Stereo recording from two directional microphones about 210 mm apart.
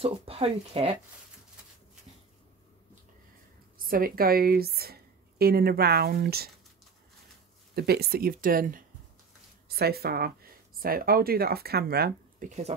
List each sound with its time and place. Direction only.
0.0 s speech: 25° right (ahead or behind)
3.8 s speech: 45° right (ahead or behind)
7.7 s speech: 50° right (ahead or behind); by 12.7 s 35° right (ahead or behind)